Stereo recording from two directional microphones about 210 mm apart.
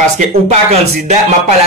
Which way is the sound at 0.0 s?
30° right (ahead or behind).